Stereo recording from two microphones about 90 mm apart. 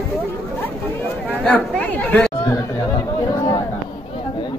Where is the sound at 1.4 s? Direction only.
15° left (ahead or behind).